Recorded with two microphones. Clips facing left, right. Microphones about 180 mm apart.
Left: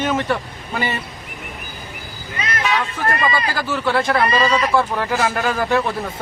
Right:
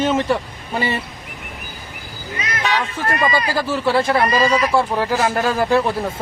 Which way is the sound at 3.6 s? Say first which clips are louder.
Even; 25° right (ahead or behind).